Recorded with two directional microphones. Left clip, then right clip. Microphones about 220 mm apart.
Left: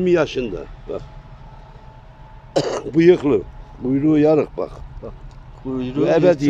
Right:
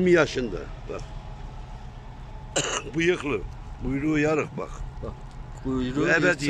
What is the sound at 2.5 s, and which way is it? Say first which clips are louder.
Speech: left 8 dB; 25° left (ahead or behind).